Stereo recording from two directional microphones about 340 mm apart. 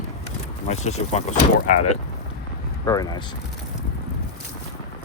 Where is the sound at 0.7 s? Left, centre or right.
Centre.